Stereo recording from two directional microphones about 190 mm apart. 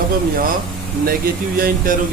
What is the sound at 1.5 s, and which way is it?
Speech, 50° right (ahead or behind).